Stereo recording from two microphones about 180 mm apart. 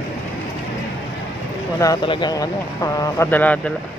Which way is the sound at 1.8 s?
25° left (ahead or behind).